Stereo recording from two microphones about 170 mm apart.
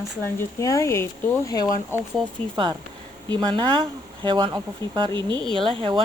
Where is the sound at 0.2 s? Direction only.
15° left (ahead or behind).